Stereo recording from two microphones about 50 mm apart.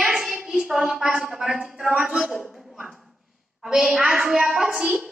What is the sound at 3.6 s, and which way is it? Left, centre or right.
A woman's voice, right.